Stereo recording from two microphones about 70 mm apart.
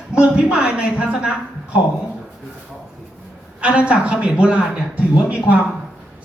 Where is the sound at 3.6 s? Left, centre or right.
Centre.